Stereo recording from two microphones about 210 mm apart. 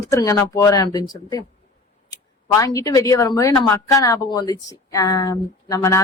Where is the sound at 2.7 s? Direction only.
15° left (ahead or behind).